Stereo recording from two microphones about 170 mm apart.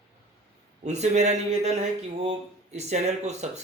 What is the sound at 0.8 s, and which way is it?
Speech, 40° right (ahead or behind).